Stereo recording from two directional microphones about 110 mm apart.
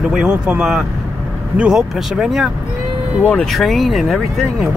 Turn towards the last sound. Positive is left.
turn(degrees=0)  # may be behind; listen again after turning